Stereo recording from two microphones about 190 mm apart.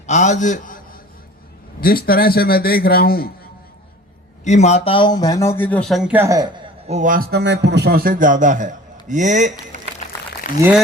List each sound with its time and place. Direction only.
0.1 s a man's voice: 40° left (ahead or behind)
1.8 s a man's voice: 50° left (ahead or behind)
4.4 s speech: 35° left (ahead or behind); by 6.5 s 15° right (ahead or behind)
6.8 s a man's voice: 40° right (ahead or behind)
10.0 s a sound: 35° left (ahead or behind)
10.6 s speech: 5° right (ahead or behind)